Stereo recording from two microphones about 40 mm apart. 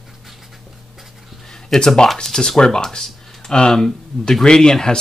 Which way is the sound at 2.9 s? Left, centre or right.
Centre.